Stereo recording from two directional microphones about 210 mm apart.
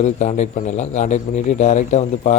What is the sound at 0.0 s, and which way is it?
Speech, 35° left (ahead or behind).